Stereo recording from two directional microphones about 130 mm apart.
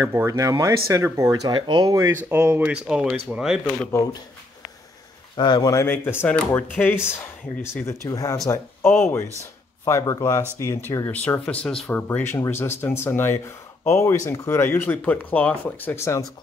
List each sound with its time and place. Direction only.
0.0 s speech: 20° right (ahead or behind)
2.2 s speech: 15° right (ahead or behind)
3.9 s speech: 25° left (ahead or behind)
5.3 s speech: 35° left (ahead or behind); by 11.9 s 5° left (ahead or behind)
11.9 s speech: 15° left (ahead or behind)